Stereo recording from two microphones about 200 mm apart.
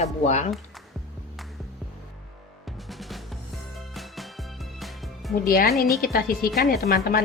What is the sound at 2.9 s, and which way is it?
Music, centre (ahead or behind).